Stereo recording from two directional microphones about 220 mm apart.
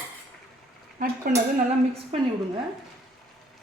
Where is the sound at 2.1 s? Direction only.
25° right (ahead or behind).